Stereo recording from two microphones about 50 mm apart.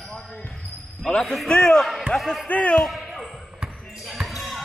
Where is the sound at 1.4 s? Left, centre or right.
Centre.